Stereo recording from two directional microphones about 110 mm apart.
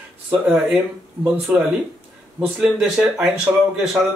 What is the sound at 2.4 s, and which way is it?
Speech, 5° right (ahead or behind).